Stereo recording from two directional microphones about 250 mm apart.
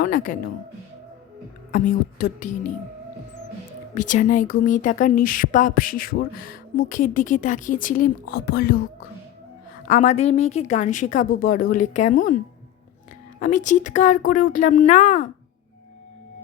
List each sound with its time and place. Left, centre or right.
0.0 s speech: left
1.7 s speech: left
3.9 s speech: left
9.8 s a woman's voice: left
13.4 s a woman's voice: left